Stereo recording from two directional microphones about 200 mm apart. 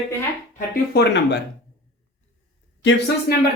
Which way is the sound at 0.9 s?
60° left (ahead or behind).